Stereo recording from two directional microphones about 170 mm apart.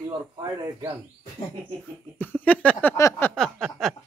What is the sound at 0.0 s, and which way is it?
Speech, 20° right (ahead or behind).